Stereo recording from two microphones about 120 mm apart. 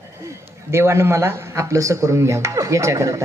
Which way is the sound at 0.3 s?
20° right (ahead or behind).